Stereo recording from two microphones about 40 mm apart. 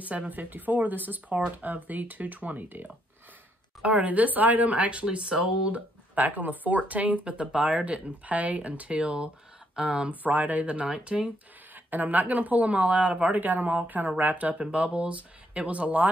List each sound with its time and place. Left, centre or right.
0.0 s speech: right
4.0 s speech: right
5.0 s speech: right
5.7 s speech: right
7.2 s speech: right
9.8 s speech: centre
10.2 s speech: right
11.7 s speech: right
13.4 s speech: right
14.6 s speech: right